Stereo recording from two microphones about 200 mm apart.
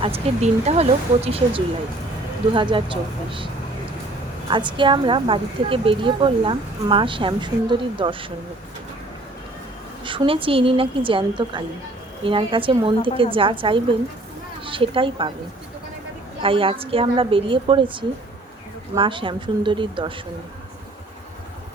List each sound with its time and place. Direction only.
0.0 s a woman's voice: 30° right (ahead or behind)
10.0 s a woman's voice: 25° right (ahead or behind)
16.4 s a woman's voice: 25° right (ahead or behind)